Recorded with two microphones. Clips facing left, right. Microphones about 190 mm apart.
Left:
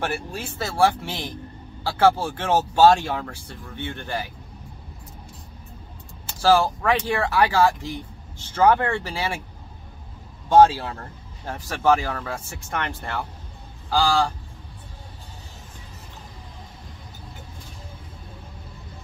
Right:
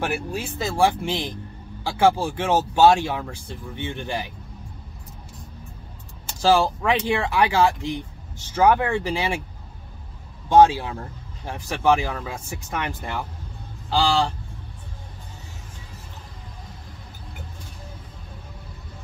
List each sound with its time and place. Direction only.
0.0 s speech: 15° right (ahead or behind)
6.4 s speech: 15° right (ahead or behind)
10.5 s speech: 15° right (ahead or behind)